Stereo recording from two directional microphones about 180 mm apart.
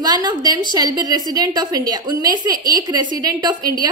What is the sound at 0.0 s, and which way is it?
A woman's voice, 25° right (ahead or behind).